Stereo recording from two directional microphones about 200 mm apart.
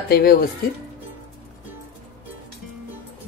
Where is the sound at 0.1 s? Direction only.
50° left (ahead or behind).